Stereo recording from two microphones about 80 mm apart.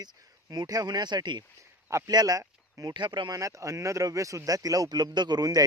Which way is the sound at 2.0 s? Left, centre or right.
Right.